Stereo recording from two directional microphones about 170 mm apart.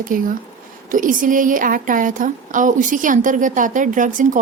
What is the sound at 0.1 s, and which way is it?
Speech, 55° right (ahead or behind).